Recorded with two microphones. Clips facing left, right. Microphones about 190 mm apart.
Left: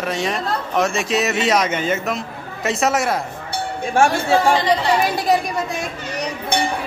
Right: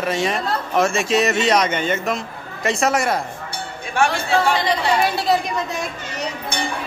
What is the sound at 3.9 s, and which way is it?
Speech, 45° left (ahead or behind).